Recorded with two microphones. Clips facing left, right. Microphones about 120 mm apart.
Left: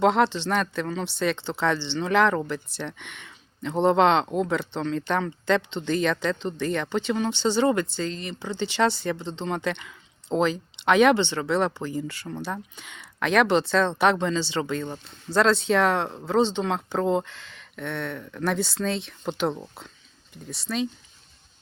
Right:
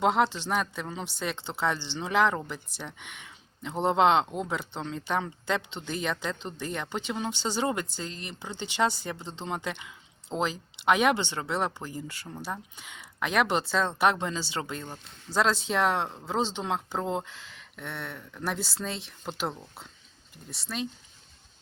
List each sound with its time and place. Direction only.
0.0 s speech: 10° right (ahead or behind)
20.5 s speech: 5° right (ahead or behind)